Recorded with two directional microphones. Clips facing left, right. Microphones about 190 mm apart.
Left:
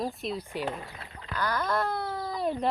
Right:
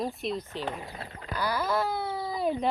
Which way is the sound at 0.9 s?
40° right (ahead or behind).